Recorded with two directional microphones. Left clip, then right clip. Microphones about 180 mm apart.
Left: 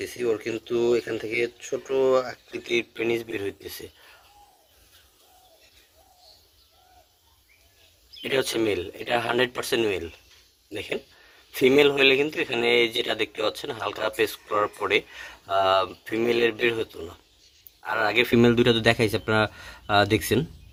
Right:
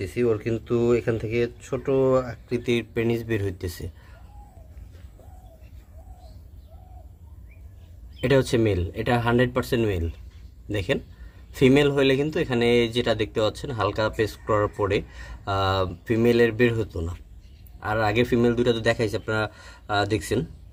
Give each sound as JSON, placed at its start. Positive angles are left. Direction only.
{"t": 0.0, "sound": "speech", "side_deg": 30}
{"t": 8.4, "sound": "speech", "side_deg": 30}
{"t": 11.5, "sound": "speech", "side_deg": 25}
{"t": 17.9, "sound": "speech", "side_deg": 30}